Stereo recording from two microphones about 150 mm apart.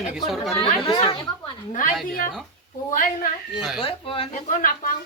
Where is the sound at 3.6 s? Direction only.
5° right (ahead or behind).